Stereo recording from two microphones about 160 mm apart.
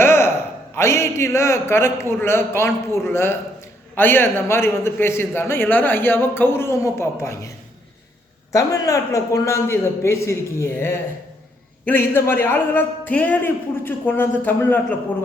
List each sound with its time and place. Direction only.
0.0 s a sound: 15° left (ahead or behind)
0.8 s a man's voice: 15° left (ahead or behind)
8.5 s a man's voice: 20° left (ahead or behind)